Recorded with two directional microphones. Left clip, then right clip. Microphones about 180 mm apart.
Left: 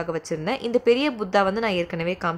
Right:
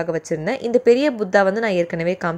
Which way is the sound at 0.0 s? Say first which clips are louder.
Right 5 dB; 25° right (ahead or behind).